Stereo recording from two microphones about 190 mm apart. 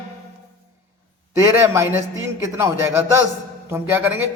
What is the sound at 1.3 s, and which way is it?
A man's voice, 15° right (ahead or behind).